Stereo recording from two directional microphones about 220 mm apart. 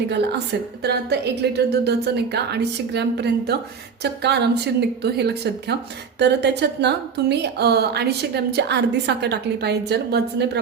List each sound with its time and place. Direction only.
0.8 s a woman's voice: 50° right (ahead or behind)